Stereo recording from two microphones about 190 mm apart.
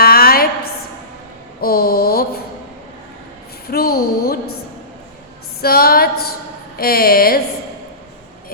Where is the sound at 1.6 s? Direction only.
55° left (ahead or behind).